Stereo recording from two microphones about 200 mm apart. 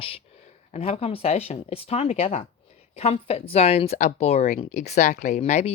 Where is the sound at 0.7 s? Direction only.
30° left (ahead or behind).